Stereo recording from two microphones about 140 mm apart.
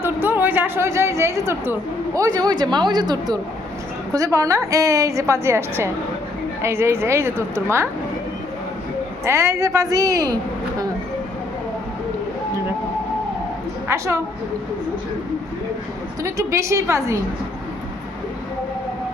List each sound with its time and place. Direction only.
0.0 s a sound: 15° right (ahead or behind)
2.1 s a woman's voice: 25° right (ahead or behind)
9.2 s a woman's voice: 20° right (ahead or behind)
13.8 s a woman's voice: 20° right (ahead or behind)
16.2 s a woman's voice: 20° right (ahead or behind)